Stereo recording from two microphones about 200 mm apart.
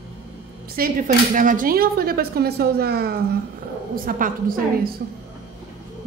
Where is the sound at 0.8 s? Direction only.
45° right (ahead or behind).